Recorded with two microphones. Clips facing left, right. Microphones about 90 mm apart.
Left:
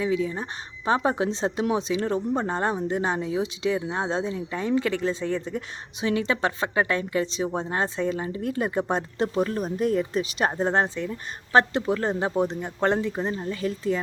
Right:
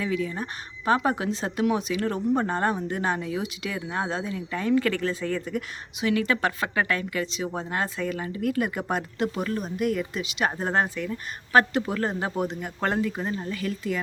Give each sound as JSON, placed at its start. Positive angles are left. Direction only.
{"t": 0.0, "sound": "speech", "side_deg": 20}